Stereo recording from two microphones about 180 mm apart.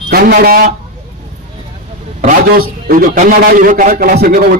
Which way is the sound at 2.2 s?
50° right (ahead or behind).